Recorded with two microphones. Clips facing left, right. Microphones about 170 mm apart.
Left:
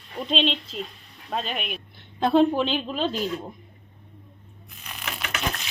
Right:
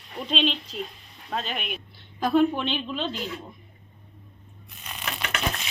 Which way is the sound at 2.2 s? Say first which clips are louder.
Left 2 dB; 30° left (ahead or behind).